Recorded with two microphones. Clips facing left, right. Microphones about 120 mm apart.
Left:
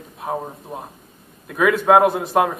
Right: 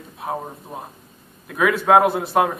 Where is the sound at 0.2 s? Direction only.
5° left (ahead or behind).